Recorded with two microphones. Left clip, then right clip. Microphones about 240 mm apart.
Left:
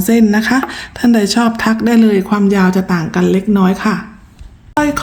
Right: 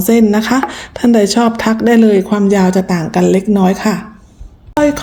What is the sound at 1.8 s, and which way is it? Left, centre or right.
A woman's voice, centre.